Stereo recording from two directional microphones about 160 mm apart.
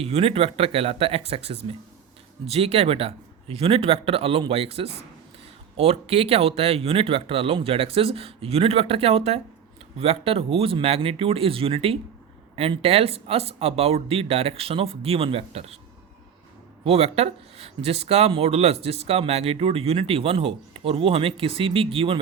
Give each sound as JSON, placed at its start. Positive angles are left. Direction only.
{"t": 0.0, "sound": "speech", "side_deg": -40}
{"t": 16.8, "sound": "speech", "side_deg": -40}